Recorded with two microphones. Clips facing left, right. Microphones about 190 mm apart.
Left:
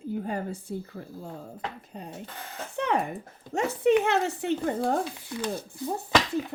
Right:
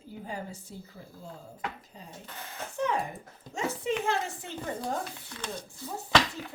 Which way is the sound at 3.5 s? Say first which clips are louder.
Left 9 dB; 60° left (ahead or behind).